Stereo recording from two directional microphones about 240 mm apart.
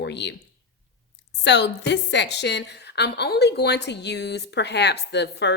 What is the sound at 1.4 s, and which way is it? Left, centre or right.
A woman's voice, left.